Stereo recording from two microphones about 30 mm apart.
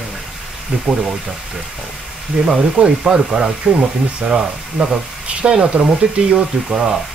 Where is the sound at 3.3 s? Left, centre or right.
Right.